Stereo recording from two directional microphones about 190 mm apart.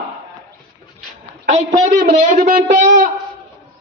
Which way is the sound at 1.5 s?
45° right (ahead or behind).